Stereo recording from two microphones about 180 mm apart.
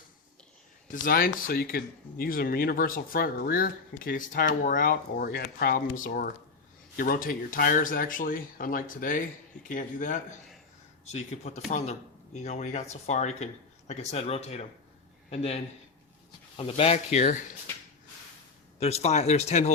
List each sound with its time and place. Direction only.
1.0 s speech: 50° left (ahead or behind)
18.8 s speech: 35° left (ahead or behind)